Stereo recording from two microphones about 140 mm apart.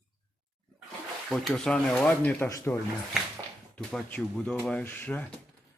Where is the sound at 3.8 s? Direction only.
5° left (ahead or behind).